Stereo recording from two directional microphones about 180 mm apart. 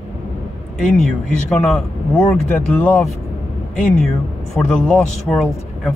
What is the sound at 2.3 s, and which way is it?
Speech, 5° left (ahead or behind).